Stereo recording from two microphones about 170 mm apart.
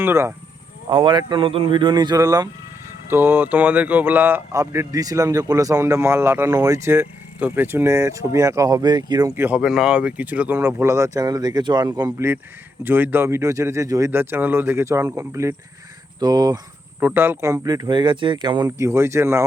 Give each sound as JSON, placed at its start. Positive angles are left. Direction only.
{"t": 0.0, "sound": "speech", "side_deg": -15}
{"t": 0.9, "sound": "speech", "side_deg": -30}
{"t": 17.0, "sound": "speech", "side_deg": -10}